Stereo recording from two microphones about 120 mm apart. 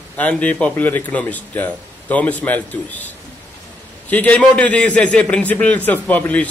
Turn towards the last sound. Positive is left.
turn(degrees=15)  # may be behind; listen again after turning